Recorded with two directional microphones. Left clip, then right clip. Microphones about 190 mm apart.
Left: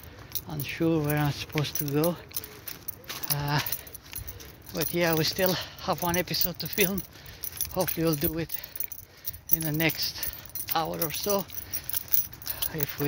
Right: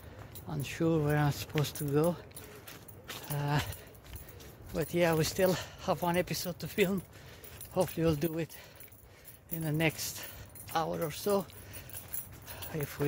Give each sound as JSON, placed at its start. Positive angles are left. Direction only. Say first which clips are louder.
{"t": 0.5, "sound": "speech", "louder": "left 4 dB", "side_deg": -20}
{"t": 3.3, "sound": "speech", "louder": "left 4 dB", "side_deg": -15}
{"t": 4.7, "sound": "speech", "louder": "left 3 dB", "side_deg": -15}
{"t": 12.5, "sound": "a sound", "louder": "left 4 dB", "side_deg": -15}